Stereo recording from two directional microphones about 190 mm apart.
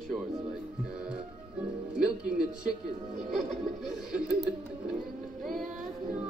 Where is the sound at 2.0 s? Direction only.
5° right (ahead or behind).